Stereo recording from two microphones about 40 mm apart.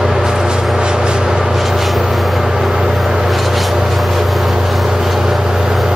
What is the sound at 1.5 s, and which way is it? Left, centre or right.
Vehicle, centre.